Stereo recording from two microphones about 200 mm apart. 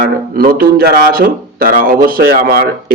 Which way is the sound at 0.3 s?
45° right (ahead or behind).